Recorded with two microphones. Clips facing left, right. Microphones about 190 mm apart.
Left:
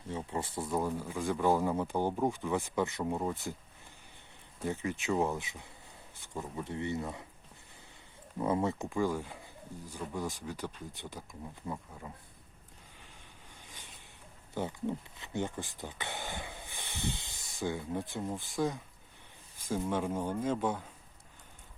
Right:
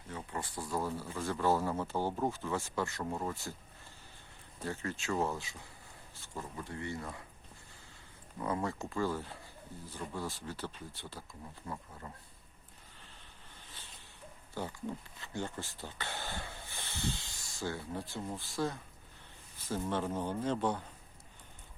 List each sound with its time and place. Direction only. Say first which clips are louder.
0.1 s speech: left 5 dB; 25° left (ahead or behind)
4.6 s speech: left 4 dB; 15° left (ahead or behind)
8.4 s speech: left 5 dB; 20° left (ahead or behind)
14.5 s speech: left 5 dB; 20° left (ahead or behind)
19.6 s speech: left 2 dB; 10° left (ahead or behind)